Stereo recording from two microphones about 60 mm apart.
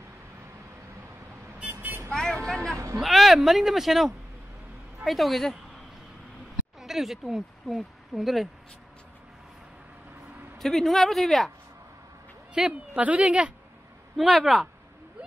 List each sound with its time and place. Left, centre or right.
1.6 s vehicle: right
2.0 s speech: centre
3.0 s speech: centre
10.6 s speech: centre
12.5 s a woman's voice: centre
14.1 s speech: centre